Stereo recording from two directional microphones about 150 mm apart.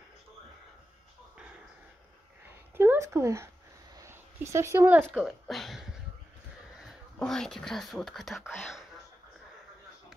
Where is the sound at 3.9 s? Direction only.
20° right (ahead or behind).